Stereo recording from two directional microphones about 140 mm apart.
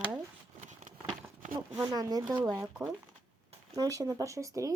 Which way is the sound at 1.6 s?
5° right (ahead or behind).